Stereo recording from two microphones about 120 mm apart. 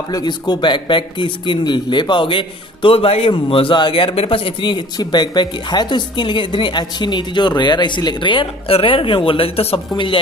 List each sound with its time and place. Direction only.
0.1 s speech: 35° left (ahead or behind)